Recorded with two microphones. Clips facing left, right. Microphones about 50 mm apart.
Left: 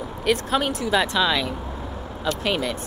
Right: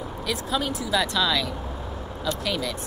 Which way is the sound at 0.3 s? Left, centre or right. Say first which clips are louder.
Left 6 dB; left.